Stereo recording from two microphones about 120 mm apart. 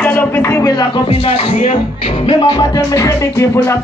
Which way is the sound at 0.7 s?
40° left (ahead or behind).